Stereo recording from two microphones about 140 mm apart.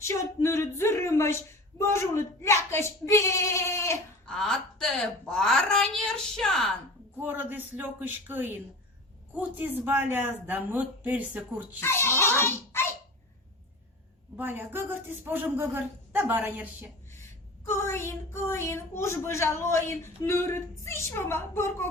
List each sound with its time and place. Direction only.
0.0 s child singing: 20° left (ahead or behind)
4.3 s a woman's voice: 5° left (ahead or behind)
7.2 s speech: 15° right (ahead or behind)
11.8 s a child's voice: 15° left (ahead or behind)
14.3 s speech: 15° right (ahead or behind)
17.2 s child singing: 20° left (ahead or behind)